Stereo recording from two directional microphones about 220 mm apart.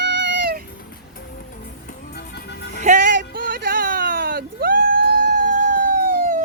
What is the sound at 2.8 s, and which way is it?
Music, 35° right (ahead or behind).